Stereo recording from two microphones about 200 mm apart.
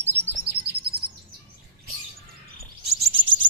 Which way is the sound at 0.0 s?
10° right (ahead or behind).